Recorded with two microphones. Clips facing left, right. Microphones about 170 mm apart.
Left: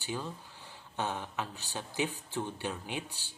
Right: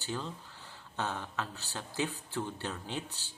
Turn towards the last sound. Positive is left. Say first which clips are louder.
# even
turn(degrees=15)  # may be behind; listen again after turning